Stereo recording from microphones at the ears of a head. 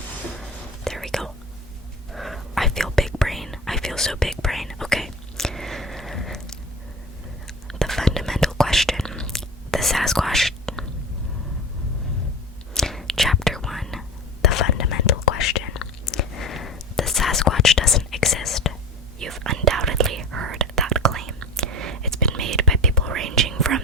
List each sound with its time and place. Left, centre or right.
0.3 s whispering: centre
7.7 s whispering: centre
12.8 s whispering: centre
14.4 s whispering: left
19.2 s whispering: right